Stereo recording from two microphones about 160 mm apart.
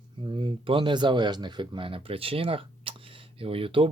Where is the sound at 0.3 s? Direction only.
30° right (ahead or behind).